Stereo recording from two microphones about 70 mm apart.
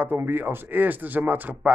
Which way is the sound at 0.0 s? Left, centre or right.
Right.